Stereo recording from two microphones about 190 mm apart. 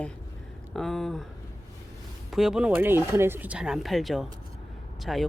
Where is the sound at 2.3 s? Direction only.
Centre (ahead or behind).